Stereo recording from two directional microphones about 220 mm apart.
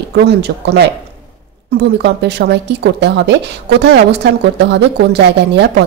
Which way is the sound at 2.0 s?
50° right (ahead or behind).